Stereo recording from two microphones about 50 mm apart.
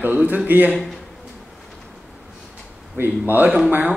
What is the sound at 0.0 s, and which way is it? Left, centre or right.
Speech, right.